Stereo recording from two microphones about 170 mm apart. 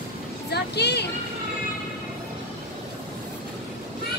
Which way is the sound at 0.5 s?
75° left (ahead or behind).